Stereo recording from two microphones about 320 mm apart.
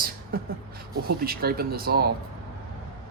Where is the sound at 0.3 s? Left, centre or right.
Right.